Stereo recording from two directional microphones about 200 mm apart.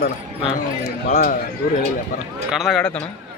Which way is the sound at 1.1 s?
45° left (ahead or behind).